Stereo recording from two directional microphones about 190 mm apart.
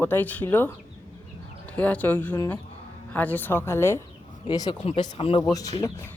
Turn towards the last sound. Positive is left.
turn(degrees=20)  # may be behind; listen again after turning